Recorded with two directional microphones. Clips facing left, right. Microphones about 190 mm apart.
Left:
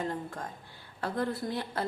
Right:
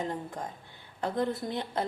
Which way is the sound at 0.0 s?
20° right (ahead or behind).